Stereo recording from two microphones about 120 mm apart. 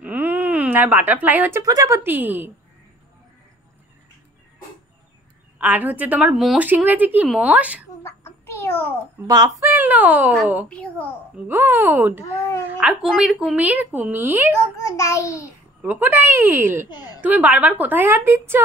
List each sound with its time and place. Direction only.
0.0 s a sound: 15° right (ahead or behind)
1.6 s speech: 30° right (ahead or behind)
2.0 s a woman's voice: 15° right (ahead or behind)
5.6 s a woman's voice: 15° right (ahead or behind)
6.3 s speech: centre (ahead or behind)
6.6 s a woman's voice: 15° right (ahead or behind)
8.0 s a sound: 20° left (ahead or behind)
9.3 s speech: 35° right (ahead or behind)
9.7 s a woman's voice: 15° right (ahead or behind)
10.7 s a child's voice: 10° left (ahead or behind)
11.4 s a woman's voice: 15° right (ahead or behind)
15.0 s a child's voice: 25° left (ahead or behind)
15.8 s a woman's voice: 15° right (ahead or behind)